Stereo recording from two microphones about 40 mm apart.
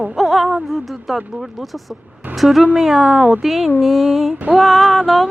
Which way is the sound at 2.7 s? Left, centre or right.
Centre.